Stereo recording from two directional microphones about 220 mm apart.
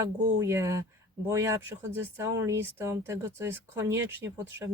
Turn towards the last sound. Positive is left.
turn(degrees=-15)  # may be behind; listen again after turning